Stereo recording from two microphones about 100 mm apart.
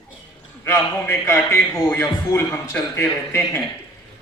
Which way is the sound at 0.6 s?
25° left (ahead or behind).